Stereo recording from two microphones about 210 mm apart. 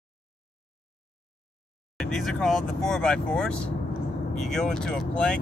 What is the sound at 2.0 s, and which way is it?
Speech, centre (ahead or behind).